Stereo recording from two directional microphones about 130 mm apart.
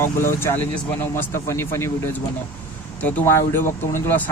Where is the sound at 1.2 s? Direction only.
20° left (ahead or behind).